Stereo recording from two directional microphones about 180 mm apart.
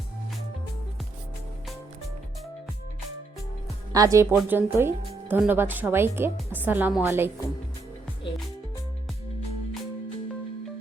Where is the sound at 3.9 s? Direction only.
20° right (ahead or behind).